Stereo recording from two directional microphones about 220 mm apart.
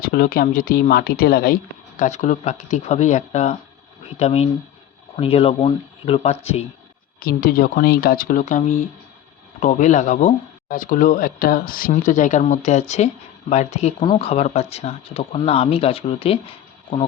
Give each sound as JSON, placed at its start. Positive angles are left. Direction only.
{"t": 0.0, "sound": "speech", "side_deg": 40}
{"t": 2.0, "sound": "speech", "side_deg": 35}
{"t": 7.2, "sound": "speech", "side_deg": 40}